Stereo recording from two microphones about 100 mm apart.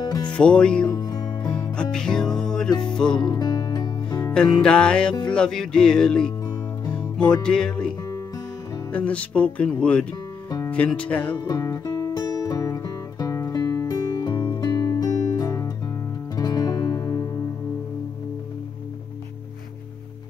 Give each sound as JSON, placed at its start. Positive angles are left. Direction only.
{"t": 0.0, "sound": "music", "side_deg": 45}
{"t": 0.3, "sound": "music", "side_deg": 10}
{"t": 0.8, "sound": "music", "side_deg": 40}
{"t": 1.6, "sound": "music", "side_deg": 10}
{"t": 3.1, "sound": "music", "side_deg": 50}
{"t": 4.3, "sound": "speech", "side_deg": 10}
{"t": 6.9, "sound": "music", "side_deg": 10}
{"t": 7.4, "sound": "speech", "side_deg": 10}
{"t": 8.9, "sound": "speech", "side_deg": 15}
{"t": 11.6, "sound": "music", "side_deg": 35}
{"t": 14.7, "sound": "music", "side_deg": 40}